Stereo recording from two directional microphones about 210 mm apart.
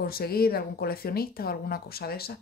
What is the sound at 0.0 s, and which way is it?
Speech, 45° left (ahead or behind).